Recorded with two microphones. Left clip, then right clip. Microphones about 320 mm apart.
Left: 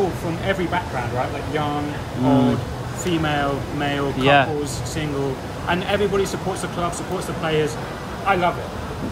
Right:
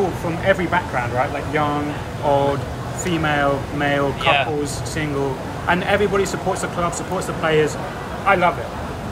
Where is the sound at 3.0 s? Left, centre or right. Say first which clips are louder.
Right 3 dB; centre.